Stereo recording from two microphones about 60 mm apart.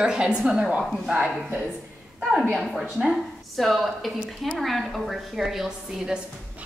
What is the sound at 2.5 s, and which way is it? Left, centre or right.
A woman's voice, centre.